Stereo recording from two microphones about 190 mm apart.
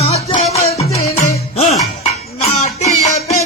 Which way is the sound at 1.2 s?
35° left (ahead or behind).